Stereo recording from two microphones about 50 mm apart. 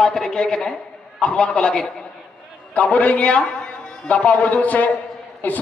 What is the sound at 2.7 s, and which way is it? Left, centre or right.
A man's voice, left.